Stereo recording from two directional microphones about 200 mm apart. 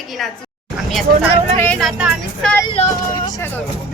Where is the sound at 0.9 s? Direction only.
Centre (ahead or behind).